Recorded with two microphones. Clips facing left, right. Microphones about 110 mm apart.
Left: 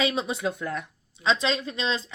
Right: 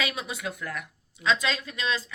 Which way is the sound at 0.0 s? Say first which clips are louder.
Left 6 dB; 25° left (ahead or behind).